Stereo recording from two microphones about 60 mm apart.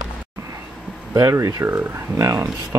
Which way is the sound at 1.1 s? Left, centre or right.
Right.